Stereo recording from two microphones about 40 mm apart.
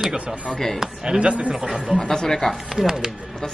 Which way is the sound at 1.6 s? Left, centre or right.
Centre.